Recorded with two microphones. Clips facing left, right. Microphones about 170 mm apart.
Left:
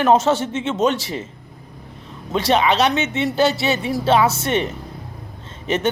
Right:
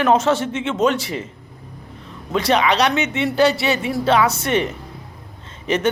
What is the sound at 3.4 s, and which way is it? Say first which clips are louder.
Speech: right 2 dB; centre (ahead or behind).